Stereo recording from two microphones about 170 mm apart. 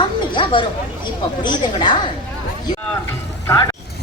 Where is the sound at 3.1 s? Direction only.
20° left (ahead or behind).